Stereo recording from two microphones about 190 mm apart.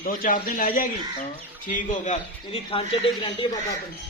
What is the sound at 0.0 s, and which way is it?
A man's voice, 50° left (ahead or behind).